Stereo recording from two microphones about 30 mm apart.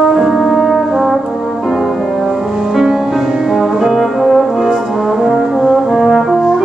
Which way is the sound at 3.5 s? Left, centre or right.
Centre.